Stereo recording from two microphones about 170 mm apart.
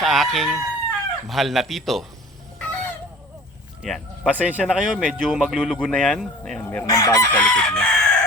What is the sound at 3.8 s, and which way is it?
Speech, centre (ahead or behind).